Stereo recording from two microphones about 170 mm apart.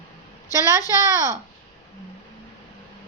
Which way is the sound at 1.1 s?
20° right (ahead or behind).